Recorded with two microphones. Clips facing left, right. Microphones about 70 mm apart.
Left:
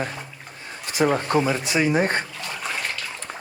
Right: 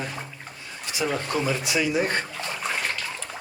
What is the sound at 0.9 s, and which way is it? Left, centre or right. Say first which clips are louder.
Speech: left 6 dB; left.